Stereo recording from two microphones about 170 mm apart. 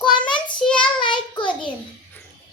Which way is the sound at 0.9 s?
30° left (ahead or behind).